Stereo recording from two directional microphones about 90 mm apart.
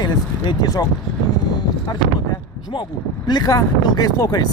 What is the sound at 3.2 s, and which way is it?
Speech, 50° left (ahead or behind).